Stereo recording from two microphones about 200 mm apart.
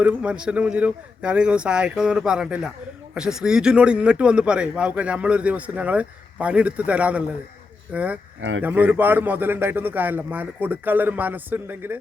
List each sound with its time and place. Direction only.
0.0 s a man's voice: 5° right (ahead or behind)
8.4 s speech: 75° right (ahead or behind)
8.6 s a man's voice: 10° right (ahead or behind)